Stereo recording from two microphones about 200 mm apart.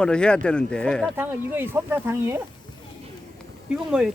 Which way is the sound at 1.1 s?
10° right (ahead or behind).